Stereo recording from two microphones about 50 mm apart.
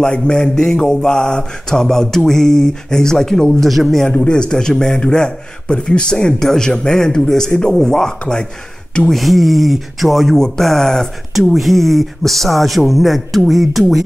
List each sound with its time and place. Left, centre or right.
0.0 s mantra: centre
3.6 s a man's voice: centre
4.1 s mantra: left
9.0 s a man's voice: centre
11.3 s a man's voice: centre